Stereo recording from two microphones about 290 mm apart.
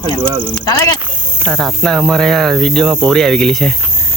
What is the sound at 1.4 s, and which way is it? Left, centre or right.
Cricket, centre.